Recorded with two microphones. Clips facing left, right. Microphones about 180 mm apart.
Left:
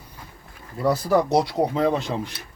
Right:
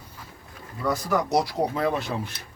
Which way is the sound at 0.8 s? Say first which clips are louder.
Left 5 dB; 30° left (ahead or behind).